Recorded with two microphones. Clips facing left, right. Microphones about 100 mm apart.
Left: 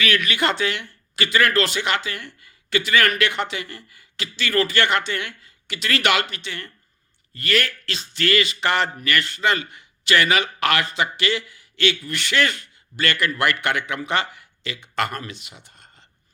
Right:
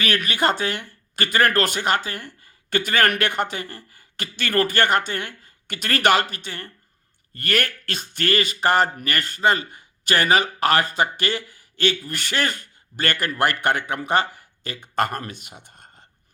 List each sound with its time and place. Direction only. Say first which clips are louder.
0.0 s speech: even; 40° right (ahead or behind)
7.3 s speech: left 1 dB; 50° right (ahead or behind)